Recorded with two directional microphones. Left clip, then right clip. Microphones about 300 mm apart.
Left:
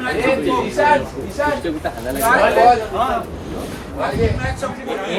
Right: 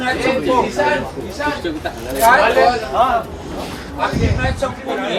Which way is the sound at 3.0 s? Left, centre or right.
Centre.